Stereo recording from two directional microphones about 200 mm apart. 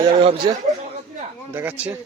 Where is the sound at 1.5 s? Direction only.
10° right (ahead or behind).